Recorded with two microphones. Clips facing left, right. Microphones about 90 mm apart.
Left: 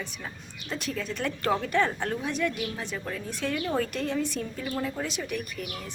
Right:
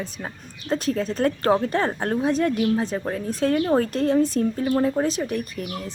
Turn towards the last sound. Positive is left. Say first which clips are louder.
# right 6 dB
turn(degrees=-35)  # may be behind; listen again after turning